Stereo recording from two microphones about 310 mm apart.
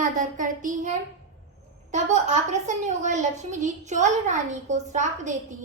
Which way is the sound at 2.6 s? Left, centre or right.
Right.